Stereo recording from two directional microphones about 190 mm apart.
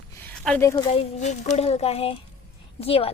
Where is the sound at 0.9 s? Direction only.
35° left (ahead or behind).